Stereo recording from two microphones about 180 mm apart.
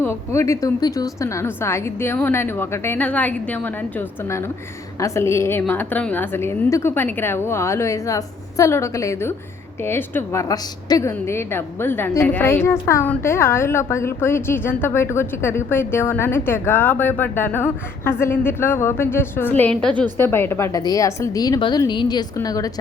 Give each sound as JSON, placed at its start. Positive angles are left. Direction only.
{"t": 0.0, "sound": "a woman's voice", "side_deg": 15}
{"t": 4.9, "sound": "a woman's voice", "side_deg": 15}